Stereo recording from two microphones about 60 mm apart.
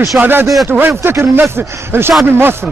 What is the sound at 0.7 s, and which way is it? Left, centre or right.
Speech, right.